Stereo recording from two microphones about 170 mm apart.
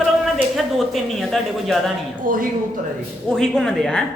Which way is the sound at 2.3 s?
55° right (ahead or behind).